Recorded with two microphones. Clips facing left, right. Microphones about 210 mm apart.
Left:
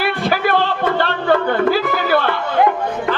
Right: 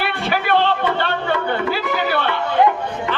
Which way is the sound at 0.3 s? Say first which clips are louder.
Right 1 dB; 40° left (ahead or behind).